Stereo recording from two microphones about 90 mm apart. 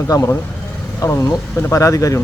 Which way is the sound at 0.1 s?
45° left (ahead or behind).